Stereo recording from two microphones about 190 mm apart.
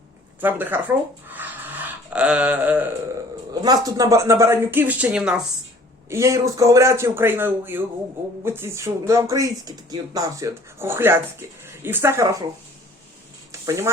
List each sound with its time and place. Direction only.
0.4 s speech: 10° right (ahead or behind)
3.5 s speech: 20° right (ahead or behind)
6.1 s speech: 15° right (ahead or behind)
13.5 s a sound: 15° right (ahead or behind)